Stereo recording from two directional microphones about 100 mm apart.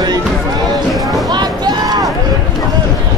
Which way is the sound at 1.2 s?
45° right (ahead or behind).